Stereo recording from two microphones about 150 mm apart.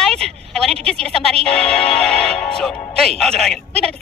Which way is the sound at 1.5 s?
5° left (ahead or behind).